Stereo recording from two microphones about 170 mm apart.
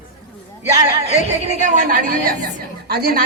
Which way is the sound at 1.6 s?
50° right (ahead or behind).